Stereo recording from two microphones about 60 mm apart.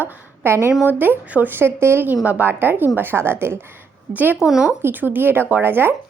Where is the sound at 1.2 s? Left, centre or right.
Right.